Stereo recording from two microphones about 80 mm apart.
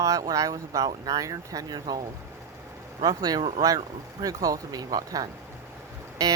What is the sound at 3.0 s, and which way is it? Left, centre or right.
Speech, right.